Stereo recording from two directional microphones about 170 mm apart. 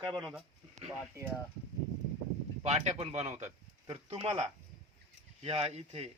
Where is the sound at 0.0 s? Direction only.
25° right (ahead or behind).